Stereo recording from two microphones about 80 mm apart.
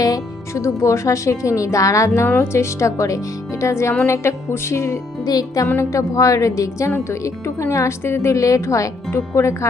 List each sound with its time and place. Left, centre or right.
0.0 s music: left
0.6 s speech: left
2.2 s speech: left
5.2 s speech: left
5.7 s speech: left